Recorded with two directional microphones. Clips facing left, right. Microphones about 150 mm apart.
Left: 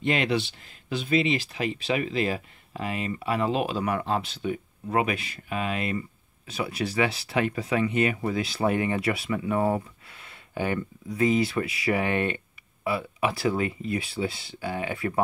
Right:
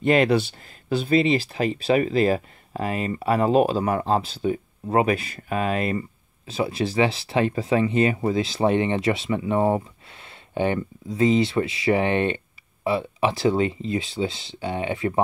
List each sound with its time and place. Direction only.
0.0 s speech: 45° right (ahead or behind)
6.4 s speech: 25° right (ahead or behind)